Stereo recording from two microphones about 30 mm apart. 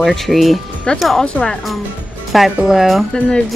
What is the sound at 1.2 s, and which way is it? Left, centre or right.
Speech, left.